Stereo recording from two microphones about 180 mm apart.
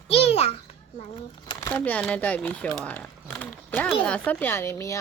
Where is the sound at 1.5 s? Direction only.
10° left (ahead or behind).